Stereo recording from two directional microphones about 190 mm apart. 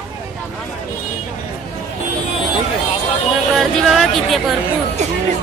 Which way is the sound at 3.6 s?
Centre (ahead or behind).